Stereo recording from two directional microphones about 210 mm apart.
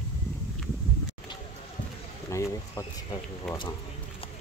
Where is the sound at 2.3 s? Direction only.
15° left (ahead or behind).